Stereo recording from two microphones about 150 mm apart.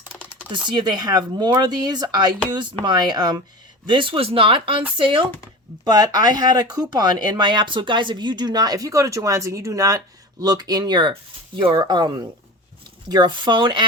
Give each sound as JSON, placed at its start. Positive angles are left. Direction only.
{"t": 0.7, "sound": "speech", "side_deg": -30}